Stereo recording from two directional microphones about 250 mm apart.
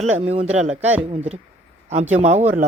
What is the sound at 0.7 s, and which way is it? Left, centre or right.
Speech, centre.